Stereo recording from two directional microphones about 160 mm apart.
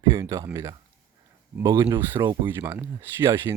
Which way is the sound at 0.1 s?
20° right (ahead or behind).